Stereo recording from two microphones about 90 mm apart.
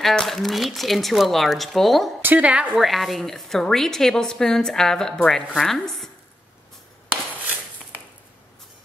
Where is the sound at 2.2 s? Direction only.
15° right (ahead or behind).